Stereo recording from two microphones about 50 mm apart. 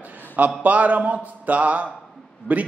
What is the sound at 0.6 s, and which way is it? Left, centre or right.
A man's voice, right.